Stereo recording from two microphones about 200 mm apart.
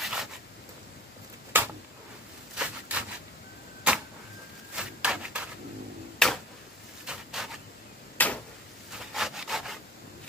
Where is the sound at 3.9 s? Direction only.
5° right (ahead or behind).